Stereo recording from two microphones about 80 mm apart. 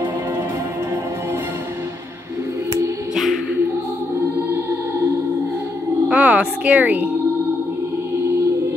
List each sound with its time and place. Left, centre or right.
4.5 s music: right
6.0 s speech: centre